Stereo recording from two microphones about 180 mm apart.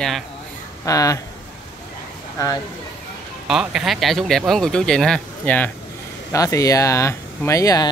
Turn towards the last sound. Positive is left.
turn(degrees=20)  # may be behind; listen again after turning